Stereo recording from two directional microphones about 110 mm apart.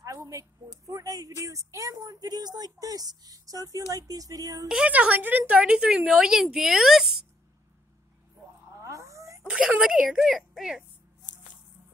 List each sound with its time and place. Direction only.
0.0 s a woman's voice: 30° right (ahead or behind)
4.6 s a woman's voice: 10° right (ahead or behind)
8.7 s a sound: 30° right (ahead or behind)
9.5 s a woman's voice: 10° right (ahead or behind)